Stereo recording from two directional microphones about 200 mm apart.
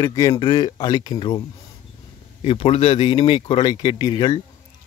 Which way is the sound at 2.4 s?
30° left (ahead or behind).